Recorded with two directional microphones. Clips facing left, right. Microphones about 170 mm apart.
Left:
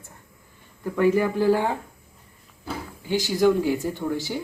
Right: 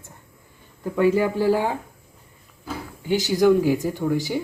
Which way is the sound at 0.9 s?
15° right (ahead or behind).